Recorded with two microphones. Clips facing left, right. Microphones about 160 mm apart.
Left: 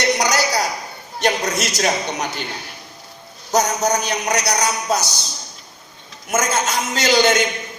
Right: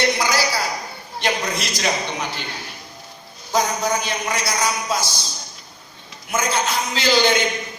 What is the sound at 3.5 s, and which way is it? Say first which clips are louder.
A man's voice: left 3 dB; 40° left (ahead or behind).